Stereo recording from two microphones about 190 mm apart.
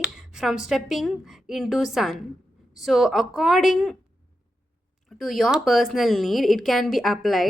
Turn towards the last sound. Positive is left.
turn(degrees=0)  # may be behind; listen again after turning